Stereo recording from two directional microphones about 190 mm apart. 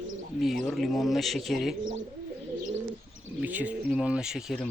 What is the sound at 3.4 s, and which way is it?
Speech, 10° right (ahead or behind).